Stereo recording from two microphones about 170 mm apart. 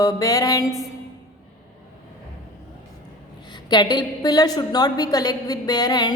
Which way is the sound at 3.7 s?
25° left (ahead or behind).